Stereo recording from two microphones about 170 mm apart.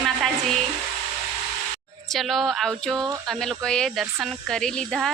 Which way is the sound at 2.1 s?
Centre (ahead or behind).